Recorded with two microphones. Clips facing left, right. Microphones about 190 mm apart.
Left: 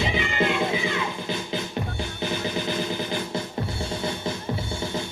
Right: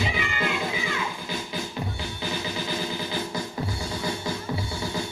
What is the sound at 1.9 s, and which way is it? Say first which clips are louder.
Music: left 3 dB; 55° left (ahead or behind).